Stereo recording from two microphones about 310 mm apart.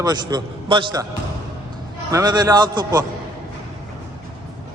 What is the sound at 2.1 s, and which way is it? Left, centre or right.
Speech, centre.